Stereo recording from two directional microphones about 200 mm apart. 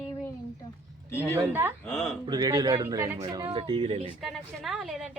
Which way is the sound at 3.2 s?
25° right (ahead or behind).